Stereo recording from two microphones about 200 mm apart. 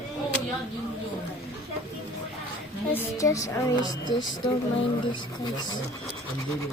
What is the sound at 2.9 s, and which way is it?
Speech, 15° left (ahead or behind).